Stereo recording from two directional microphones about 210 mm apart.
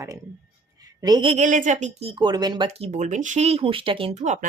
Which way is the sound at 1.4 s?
35° right (ahead or behind).